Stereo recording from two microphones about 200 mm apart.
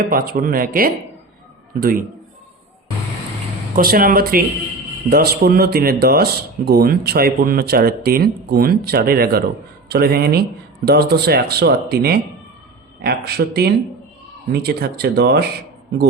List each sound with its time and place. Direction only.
0.0 s speech: 45° right (ahead or behind)
3.8 s speech: 45° right (ahead or behind)